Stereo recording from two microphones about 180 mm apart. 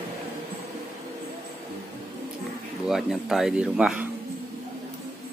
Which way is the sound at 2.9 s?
Centre (ahead or behind).